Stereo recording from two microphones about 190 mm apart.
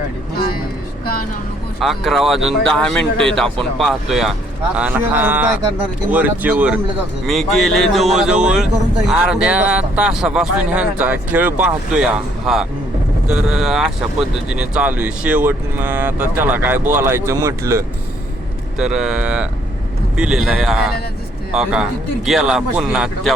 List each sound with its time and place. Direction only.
0.3 s speech: 55° left (ahead or behind)
1.8 s speech: centre (ahead or behind); by 17.5 s 15° right (ahead or behind)
18.8 s speech: 5° right (ahead or behind)